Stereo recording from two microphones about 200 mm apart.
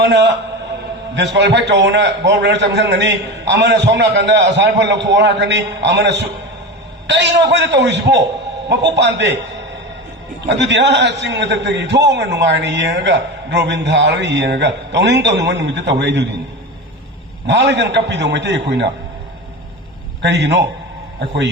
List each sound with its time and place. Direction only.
0.0 s a man's voice: 60° right (ahead or behind)
10.6 s a man's voice: 60° right (ahead or behind)
17.4 s a man's voice: 60° right (ahead or behind)
20.2 s a man's voice: 60° right (ahead or behind)